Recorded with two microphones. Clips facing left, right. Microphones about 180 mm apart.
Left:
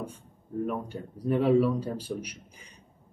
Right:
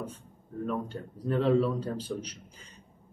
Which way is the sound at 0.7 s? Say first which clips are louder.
Even; 10° left (ahead or behind).